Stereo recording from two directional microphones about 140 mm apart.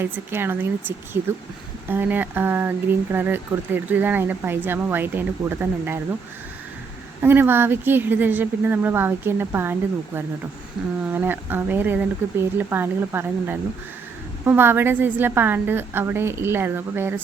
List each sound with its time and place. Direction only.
0.0 s speech: 15° right (ahead or behind)
7.2 s speech: 15° right (ahead or behind)
11.1 s speech: 15° right (ahead or behind)